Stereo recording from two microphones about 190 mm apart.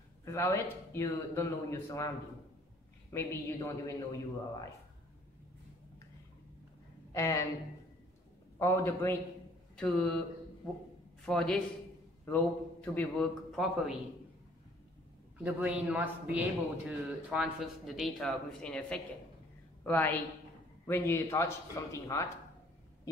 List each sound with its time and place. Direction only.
0.2 s speech: 15° left (ahead or behind)
3.1 s speech: 15° left (ahead or behind)
7.1 s speech: 15° left (ahead or behind)
8.5 s a man's voice: 15° left (ahead or behind)
11.2 s a man's voice: 5° left (ahead or behind)
15.4 s a man's voice: 5° right (ahead or behind); by 22.3 s 15° left (ahead or behind)